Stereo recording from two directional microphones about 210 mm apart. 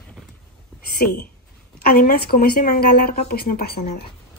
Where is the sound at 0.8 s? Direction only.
45° left (ahead or behind).